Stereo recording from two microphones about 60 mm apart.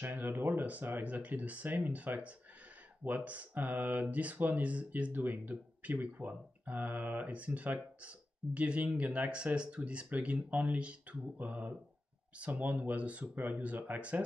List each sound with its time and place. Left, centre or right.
0.0 s speech: right